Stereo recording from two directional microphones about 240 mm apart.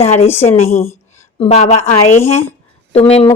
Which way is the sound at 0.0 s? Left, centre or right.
Left.